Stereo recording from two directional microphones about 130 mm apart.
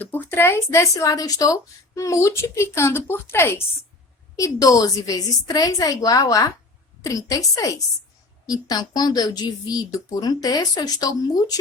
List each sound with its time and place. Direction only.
0.0 s speech: 15° left (ahead or behind)